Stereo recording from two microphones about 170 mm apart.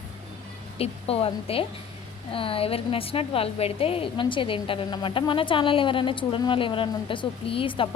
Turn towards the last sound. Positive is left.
turn(degrees=30)  # may be behind; listen again after turning